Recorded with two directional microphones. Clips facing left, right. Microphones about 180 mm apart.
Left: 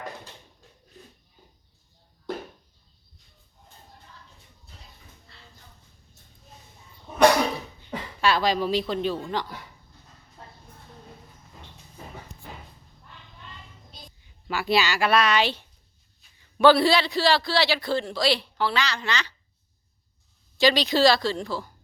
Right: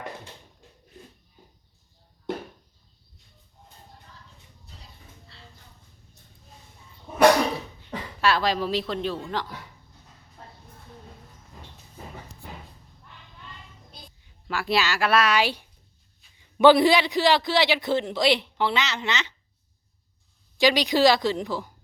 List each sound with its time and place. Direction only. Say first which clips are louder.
7.1 s cough: right 2 dB; 5° right (ahead or behind)
7.8 s a man's voice: even; centre (ahead or behind)
14.4 s a man's voice: left 1 dB; centre (ahead or behind); by 19.3 s 20° right (ahead or behind)
20.6 s speech: even; 15° right (ahead or behind)